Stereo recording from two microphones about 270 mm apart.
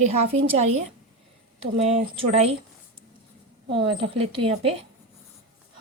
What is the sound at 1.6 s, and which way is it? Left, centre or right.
Speech, right.